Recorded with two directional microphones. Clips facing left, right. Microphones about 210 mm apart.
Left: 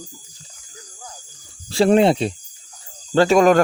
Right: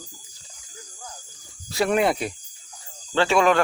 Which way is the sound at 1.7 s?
30° left (ahead or behind).